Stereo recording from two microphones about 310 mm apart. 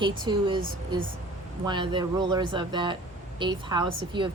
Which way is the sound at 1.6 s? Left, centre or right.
Centre.